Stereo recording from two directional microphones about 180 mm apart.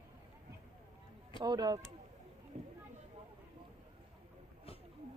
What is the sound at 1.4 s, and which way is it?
Speech, 20° right (ahead or behind).